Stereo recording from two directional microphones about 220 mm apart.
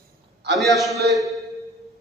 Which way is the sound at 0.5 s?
Centre (ahead or behind).